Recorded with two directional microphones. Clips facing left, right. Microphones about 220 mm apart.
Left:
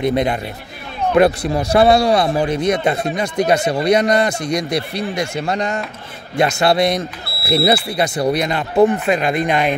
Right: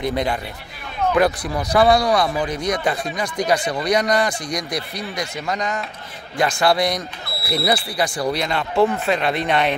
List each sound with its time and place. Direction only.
0.0 s speech: 20° left (ahead or behind)